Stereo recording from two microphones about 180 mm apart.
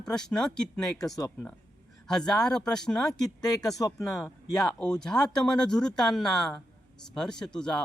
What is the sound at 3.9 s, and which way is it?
Speech, centre (ahead or behind).